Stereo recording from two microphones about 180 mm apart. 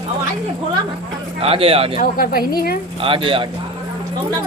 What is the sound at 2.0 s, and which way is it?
Speech, 50° left (ahead or behind).